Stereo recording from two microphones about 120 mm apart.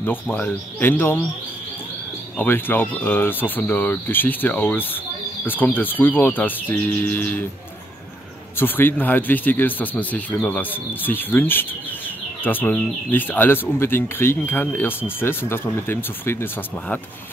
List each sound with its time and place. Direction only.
0.0 s speech: 15° left (ahead or behind)
2.3 s speech: 15° left (ahead or behind)
8.5 s speech: 15° left (ahead or behind)